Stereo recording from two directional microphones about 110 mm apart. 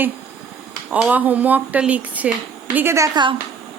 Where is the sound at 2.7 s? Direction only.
25° right (ahead or behind).